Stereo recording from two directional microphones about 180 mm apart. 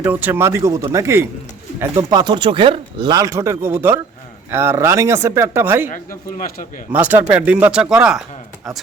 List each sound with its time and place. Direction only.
0.0 s speech: 10° right (ahead or behind)
5.9 s speech: 45° left (ahead or behind)
6.9 s speech: 10° right (ahead or behind)